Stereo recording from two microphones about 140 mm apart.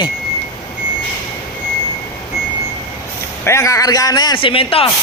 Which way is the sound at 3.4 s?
20° left (ahead or behind).